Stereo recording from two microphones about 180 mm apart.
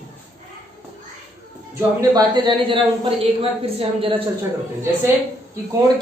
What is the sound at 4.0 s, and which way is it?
Speech, 30° right (ahead or behind).